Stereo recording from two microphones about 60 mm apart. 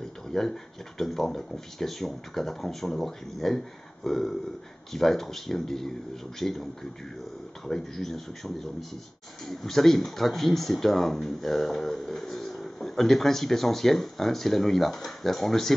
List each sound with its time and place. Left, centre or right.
0.3 s speech: centre